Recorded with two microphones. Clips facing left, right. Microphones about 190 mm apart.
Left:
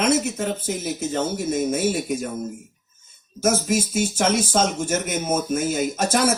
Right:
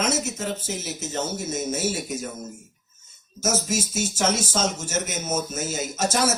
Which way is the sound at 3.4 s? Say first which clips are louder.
Left 5 dB; 55° left (ahead or behind).